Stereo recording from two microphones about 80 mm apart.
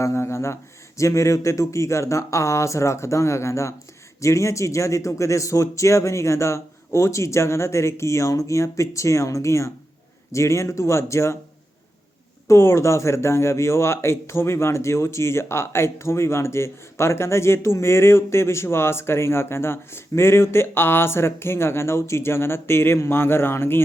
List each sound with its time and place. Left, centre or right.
0.0 s speech: left
12.5 s speech: left